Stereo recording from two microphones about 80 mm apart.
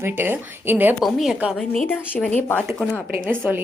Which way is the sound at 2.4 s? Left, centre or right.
Left.